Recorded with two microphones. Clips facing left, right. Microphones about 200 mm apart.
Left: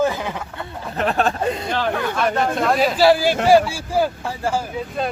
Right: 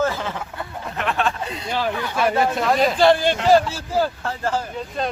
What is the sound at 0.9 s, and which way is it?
Speech, 40° left (ahead or behind).